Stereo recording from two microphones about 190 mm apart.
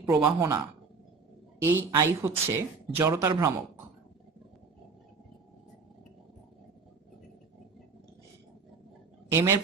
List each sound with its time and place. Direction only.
0.2 s speech: 15° right (ahead or behind)
1.6 s speech: 15° right (ahead or behind)
9.3 s speech: 15° right (ahead or behind)